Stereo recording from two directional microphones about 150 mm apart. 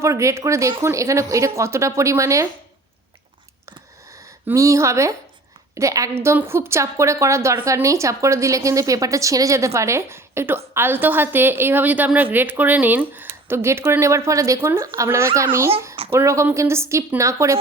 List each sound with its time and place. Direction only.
0.0 s speech: 20° right (ahead or behind)
3.7 s a sound: 20° right (ahead or behind)
5.7 s a woman's voice: 20° right (ahead or behind)